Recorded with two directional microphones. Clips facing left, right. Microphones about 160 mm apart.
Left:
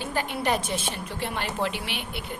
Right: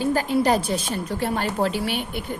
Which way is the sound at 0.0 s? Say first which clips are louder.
Right 8 dB; 40° right (ahead or behind).